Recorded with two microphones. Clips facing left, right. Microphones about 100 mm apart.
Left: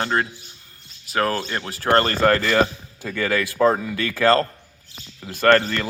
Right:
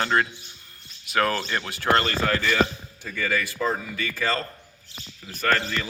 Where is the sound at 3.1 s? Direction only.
90° left; by 3.8 s 65° left (ahead or behind).